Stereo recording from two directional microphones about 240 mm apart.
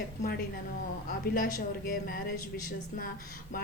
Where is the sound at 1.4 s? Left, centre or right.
Left.